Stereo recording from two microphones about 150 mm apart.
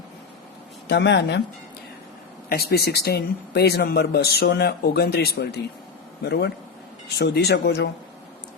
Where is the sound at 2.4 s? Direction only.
90° left.